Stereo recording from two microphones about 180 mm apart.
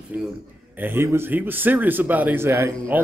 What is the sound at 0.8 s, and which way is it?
A man's voice, 10° right (ahead or behind).